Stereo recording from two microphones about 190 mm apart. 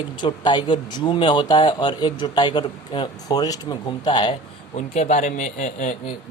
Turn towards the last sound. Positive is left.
turn(degrees=40)  # may be behind; listen again after turning